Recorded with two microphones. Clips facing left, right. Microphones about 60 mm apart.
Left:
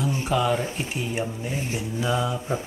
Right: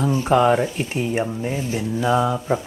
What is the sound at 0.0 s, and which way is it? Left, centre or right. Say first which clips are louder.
Speech: right 7 dB; right.